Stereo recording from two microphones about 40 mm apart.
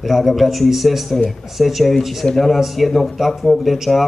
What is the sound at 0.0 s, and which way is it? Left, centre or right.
A man's voice, centre.